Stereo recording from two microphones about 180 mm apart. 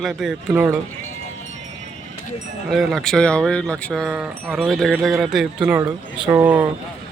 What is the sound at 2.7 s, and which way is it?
Speech, centre (ahead or behind).